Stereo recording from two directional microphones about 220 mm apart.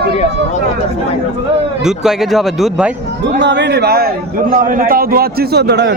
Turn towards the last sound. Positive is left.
turn(degrees=-50)  # may be behind; listen again after turning